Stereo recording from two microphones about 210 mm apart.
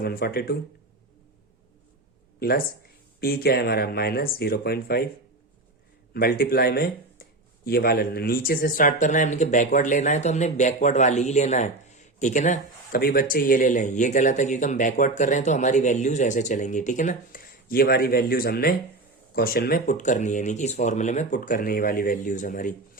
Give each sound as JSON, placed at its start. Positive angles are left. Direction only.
{"t": 0.0, "sound": "speech", "side_deg": 45}
{"t": 2.4, "sound": "speech", "side_deg": 45}
{"t": 6.1, "sound": "speech", "side_deg": 45}